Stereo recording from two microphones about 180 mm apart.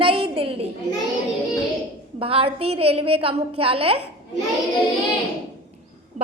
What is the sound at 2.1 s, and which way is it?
A woman's voice, 30° right (ahead or behind).